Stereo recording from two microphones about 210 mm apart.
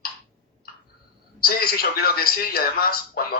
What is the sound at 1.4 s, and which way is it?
A man's voice, 45° left (ahead or behind).